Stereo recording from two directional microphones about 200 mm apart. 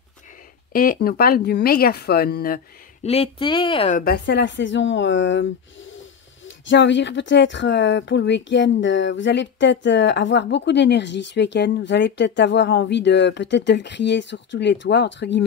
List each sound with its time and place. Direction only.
0.7 s speech: 50° left (ahead or behind)
3.0 s speech: 30° left (ahead or behind)
4.0 s speech: 55° left (ahead or behind)